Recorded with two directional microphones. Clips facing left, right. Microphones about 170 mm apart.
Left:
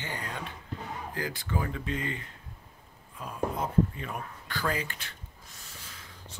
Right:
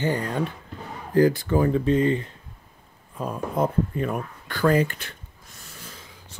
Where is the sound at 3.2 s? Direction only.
50° right (ahead or behind).